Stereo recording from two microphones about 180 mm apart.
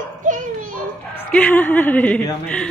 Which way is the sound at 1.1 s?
10° left (ahead or behind).